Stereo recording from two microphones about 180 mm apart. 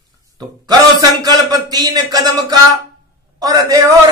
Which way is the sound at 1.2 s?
20° right (ahead or behind).